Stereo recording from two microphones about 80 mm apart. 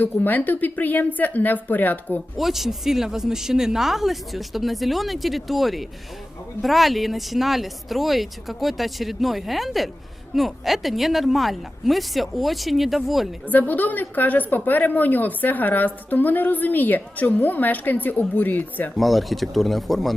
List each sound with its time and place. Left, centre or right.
0.0 s a woman's voice: left
2.4 s speech: centre
13.5 s a woman's voice: left
18.9 s speech: centre